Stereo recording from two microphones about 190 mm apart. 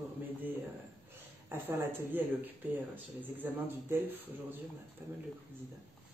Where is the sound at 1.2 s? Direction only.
10° right (ahead or behind).